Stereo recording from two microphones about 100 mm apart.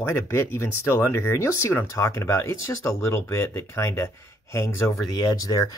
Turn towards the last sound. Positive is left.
turn(degrees=40)  # may be behind; listen again after turning